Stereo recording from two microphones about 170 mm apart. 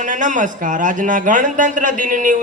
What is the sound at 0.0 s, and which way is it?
A man's voice, 50° right (ahead or behind).